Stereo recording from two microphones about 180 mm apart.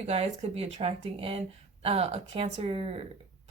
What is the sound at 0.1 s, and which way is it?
Speech, 35° right (ahead or behind).